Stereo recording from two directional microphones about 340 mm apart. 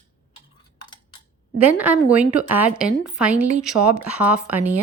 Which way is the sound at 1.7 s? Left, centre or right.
Centre.